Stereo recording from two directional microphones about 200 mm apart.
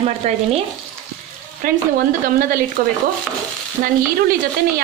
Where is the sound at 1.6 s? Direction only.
45° right (ahead or behind).